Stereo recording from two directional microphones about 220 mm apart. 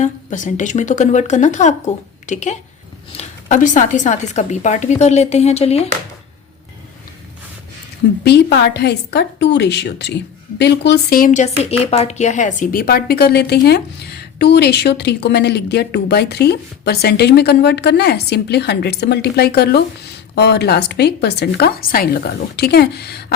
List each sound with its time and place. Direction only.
0.0 s speech: 35° left (ahead or behind)
8.2 s a woman's voice: 50° left (ahead or behind)